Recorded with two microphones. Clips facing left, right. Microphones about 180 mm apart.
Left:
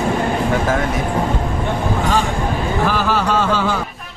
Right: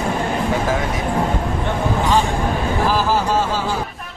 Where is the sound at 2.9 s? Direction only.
70° left (ahead or behind).